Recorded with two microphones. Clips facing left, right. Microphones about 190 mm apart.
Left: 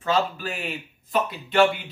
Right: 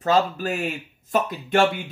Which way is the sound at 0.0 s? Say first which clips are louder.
Right 3 dB; 40° right (ahead or behind).